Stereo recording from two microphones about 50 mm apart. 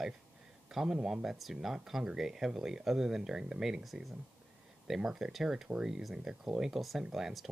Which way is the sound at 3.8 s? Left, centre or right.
Centre.